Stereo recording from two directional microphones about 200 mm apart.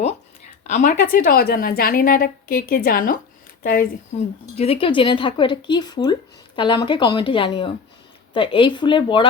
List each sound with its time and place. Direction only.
0.7 s a woman's voice: 35° left (ahead or behind)
4.5 s speech: 30° left (ahead or behind)